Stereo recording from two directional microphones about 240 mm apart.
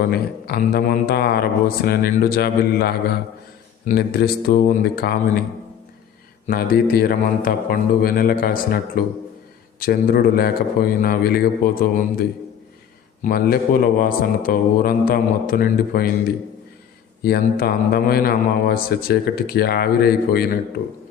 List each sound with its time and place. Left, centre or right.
0.0 s a man's voice: left
6.5 s a man's voice: left
13.2 s a man's voice: left
17.2 s a man's voice: left